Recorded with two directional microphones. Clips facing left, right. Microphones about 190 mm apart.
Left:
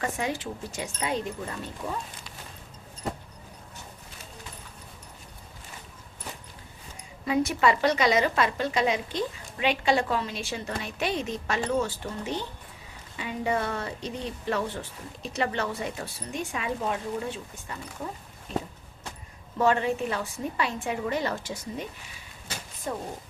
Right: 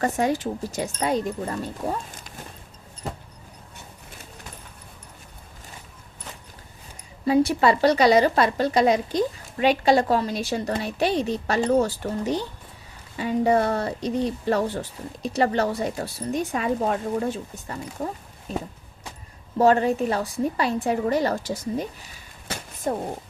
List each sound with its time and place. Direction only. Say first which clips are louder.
0.0 s speech: right 7 dB; 40° right (ahead or behind)
7.3 s speech: right 5 dB; 35° right (ahead or behind)
19.5 s speech: right 6 dB; 40° right (ahead or behind)
22.4 s a sound: right 7 dB; 50° right (ahead or behind)